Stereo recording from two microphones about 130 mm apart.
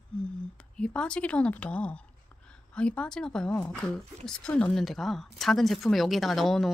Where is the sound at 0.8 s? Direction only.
5° left (ahead or behind).